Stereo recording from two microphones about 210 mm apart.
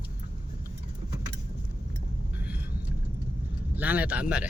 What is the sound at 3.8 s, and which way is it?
Speech, 5° right (ahead or behind).